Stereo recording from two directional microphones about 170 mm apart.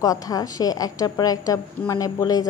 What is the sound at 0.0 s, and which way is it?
Speech, 20° left (ahead or behind).